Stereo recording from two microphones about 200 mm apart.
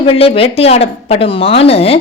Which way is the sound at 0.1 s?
30° left (ahead or behind).